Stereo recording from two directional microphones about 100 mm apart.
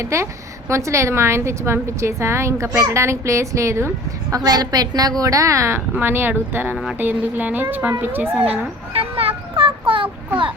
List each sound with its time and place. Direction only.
0.0 s a woman's voice: 30° right (ahead or behind)
4.4 s a woman's voice: 40° right (ahead or behind); by 8.4 s 20° right (ahead or behind)
8.4 s a sound: 75° right (ahead or behind); by 10.1 s 60° right (ahead or behind)